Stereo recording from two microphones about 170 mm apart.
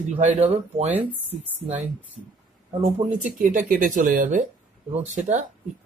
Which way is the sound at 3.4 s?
55° right (ahead or behind).